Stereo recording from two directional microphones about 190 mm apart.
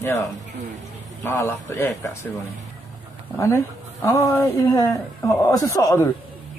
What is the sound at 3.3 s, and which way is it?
A woman's voice, 15° left (ahead or behind).